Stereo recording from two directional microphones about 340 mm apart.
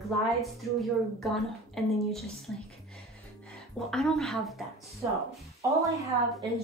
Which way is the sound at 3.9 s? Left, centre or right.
Centre.